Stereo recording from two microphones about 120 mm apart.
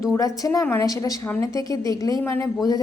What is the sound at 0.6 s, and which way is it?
Speech, 20° left (ahead or behind).